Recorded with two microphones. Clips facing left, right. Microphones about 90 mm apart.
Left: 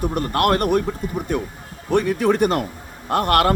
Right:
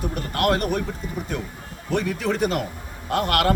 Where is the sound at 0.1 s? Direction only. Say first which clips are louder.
Left 2 dB; 55° left (ahead or behind).